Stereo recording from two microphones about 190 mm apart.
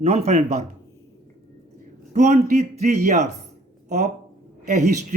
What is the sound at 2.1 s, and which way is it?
Speech, 40° right (ahead or behind).